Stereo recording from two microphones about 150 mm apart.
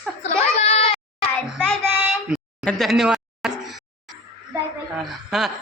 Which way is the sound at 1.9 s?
10° right (ahead or behind).